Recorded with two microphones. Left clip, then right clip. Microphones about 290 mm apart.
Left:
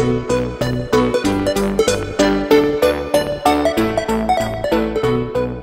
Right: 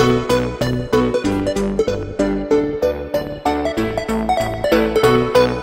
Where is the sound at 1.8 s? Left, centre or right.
Left.